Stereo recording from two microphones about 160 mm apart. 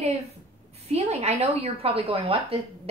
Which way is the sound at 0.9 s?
40° right (ahead or behind).